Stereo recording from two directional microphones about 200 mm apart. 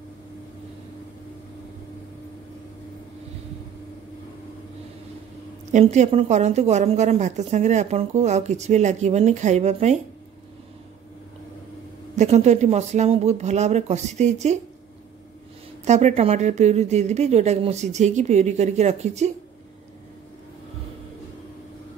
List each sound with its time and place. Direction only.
5.7 s a woman's voice: 35° right (ahead or behind)
12.2 s a woman's voice: 35° right (ahead or behind)
15.8 s a woman's voice: 35° right (ahead or behind)